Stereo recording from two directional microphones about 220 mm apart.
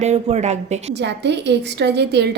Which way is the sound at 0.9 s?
50° right (ahead or behind).